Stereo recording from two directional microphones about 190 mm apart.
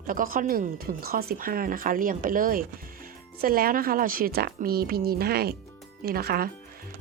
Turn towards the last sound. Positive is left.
turn(degrees=-55)  # may be behind; listen again after turning